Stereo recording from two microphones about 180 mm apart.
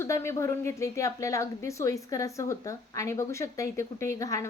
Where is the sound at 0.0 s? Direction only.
15° left (ahead or behind).